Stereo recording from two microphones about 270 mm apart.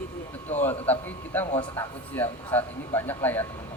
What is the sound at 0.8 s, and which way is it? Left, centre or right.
Speech, centre.